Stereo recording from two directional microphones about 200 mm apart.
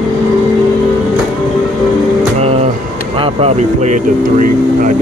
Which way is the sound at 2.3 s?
30° right (ahead or behind).